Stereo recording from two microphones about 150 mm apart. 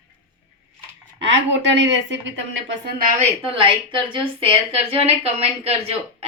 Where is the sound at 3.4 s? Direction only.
40° right (ahead or behind).